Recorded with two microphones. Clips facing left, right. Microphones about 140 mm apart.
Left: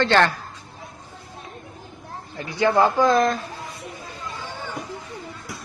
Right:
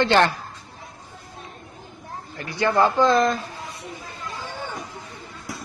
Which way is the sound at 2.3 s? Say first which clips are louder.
Left 1 dB; 15° left (ahead or behind).